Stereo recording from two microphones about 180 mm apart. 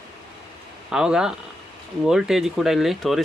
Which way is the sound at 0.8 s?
5° right (ahead or behind).